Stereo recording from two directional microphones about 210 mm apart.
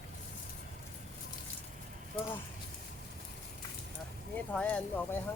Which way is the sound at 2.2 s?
25° left (ahead or behind).